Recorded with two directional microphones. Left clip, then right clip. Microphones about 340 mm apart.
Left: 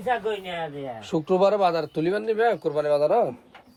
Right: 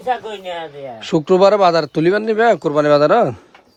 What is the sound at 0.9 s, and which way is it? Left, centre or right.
Speech, right.